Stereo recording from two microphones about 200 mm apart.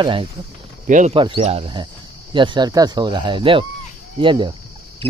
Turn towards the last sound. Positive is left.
turn(degrees=-25)  # may be behind; listen again after turning